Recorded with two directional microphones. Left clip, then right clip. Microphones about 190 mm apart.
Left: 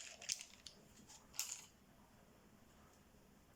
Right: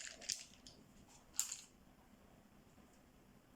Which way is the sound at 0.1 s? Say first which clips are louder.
Left 3 dB; 15° left (ahead or behind).